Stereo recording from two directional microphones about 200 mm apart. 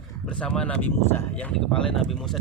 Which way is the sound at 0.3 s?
5° left (ahead or behind).